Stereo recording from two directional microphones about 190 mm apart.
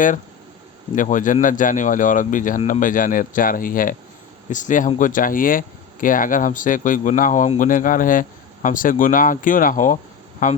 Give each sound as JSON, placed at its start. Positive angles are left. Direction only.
{"t": 0.9, "sound": "speech", "side_deg": 45}